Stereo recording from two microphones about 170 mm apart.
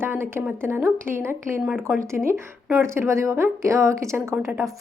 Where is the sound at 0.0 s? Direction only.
15° right (ahead or behind).